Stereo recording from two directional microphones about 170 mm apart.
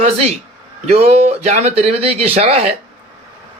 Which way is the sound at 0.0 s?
40° right (ahead or behind).